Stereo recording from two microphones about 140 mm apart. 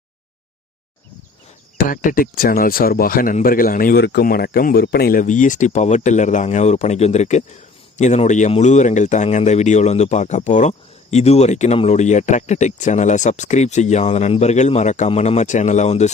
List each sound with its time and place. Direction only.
1.8 s speech: 75° left (ahead or behind); by 16.1 s 55° left (ahead or behind)